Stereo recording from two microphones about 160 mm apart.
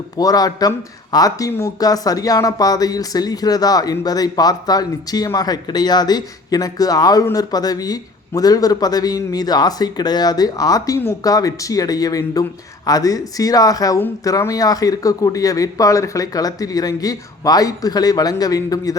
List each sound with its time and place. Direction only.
0.2 s speech: 25° left (ahead or behind)